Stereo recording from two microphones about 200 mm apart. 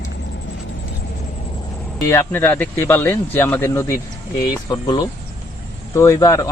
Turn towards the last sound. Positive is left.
turn(degrees=15)  # may be behind; listen again after turning